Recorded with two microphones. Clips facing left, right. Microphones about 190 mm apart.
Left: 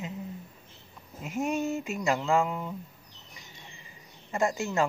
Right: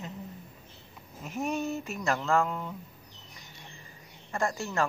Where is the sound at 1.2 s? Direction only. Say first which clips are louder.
Left 2 dB; 15° left (ahead or behind).